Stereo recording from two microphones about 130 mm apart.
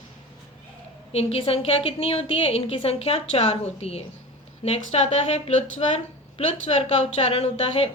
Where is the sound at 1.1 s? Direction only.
50° left (ahead or behind).